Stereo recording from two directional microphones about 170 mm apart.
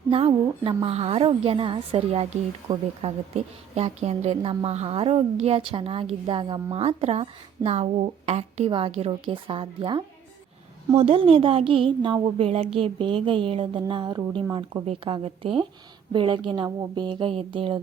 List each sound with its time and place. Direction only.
0.6 s a woman's voice: 30° right (ahead or behind)